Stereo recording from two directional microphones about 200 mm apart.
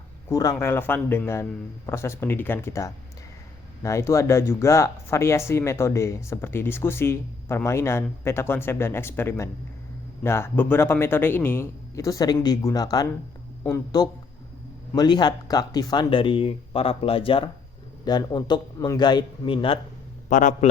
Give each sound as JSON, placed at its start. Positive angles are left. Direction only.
{"t": 0.3, "sound": "speech", "side_deg": 15}
{"t": 20.3, "sound": "a man's voice", "side_deg": 40}